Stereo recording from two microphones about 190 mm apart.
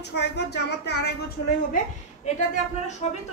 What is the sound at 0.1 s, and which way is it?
A woman's voice, 60° left (ahead or behind).